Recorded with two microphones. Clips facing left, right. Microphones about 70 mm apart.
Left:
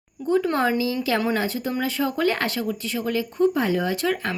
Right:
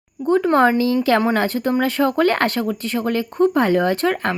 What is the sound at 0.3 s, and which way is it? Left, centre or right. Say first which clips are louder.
Speech: right 6 dB; right.